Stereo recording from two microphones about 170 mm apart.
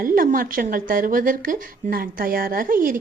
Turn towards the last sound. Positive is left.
turn(degrees=-55)  # may be behind; listen again after turning